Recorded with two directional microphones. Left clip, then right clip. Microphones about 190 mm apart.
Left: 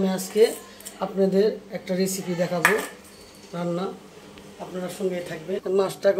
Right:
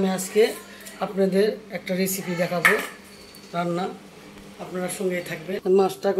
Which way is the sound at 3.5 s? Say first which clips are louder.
Right 2 dB; 15° left (ahead or behind).